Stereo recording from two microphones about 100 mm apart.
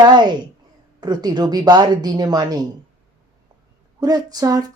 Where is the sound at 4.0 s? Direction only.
40° right (ahead or behind).